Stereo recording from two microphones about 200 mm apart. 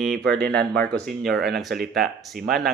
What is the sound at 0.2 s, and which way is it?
Speech, 50° right (ahead or behind).